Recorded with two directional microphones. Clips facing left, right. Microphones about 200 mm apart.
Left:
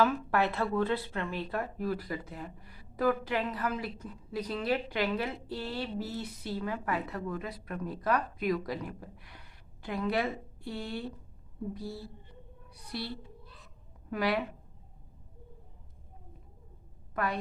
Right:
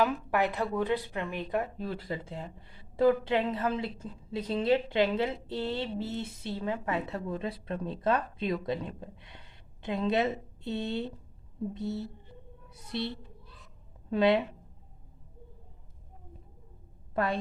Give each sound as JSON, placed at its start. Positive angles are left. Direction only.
{"t": 0.0, "sound": "speech", "side_deg": -15}
{"t": 17.2, "sound": "a woman's voice", "side_deg": -30}